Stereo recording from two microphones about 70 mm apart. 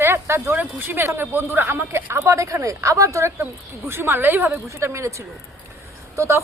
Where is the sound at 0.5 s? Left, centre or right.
Right.